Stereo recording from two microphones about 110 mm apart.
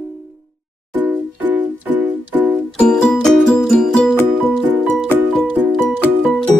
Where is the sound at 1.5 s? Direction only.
15° right (ahead or behind).